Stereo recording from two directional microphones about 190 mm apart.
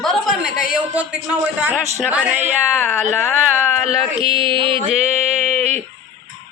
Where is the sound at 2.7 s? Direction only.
10° left (ahead or behind).